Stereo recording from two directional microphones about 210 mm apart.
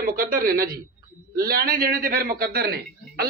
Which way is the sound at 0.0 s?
40° right (ahead or behind).